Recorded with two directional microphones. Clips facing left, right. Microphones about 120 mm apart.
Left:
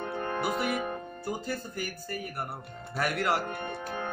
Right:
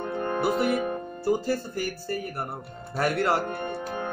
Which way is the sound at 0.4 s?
30° right (ahead or behind).